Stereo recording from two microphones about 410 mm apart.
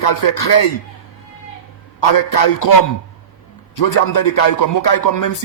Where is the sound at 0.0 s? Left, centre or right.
Left.